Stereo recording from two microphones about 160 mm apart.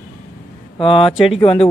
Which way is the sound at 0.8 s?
35° left (ahead or behind).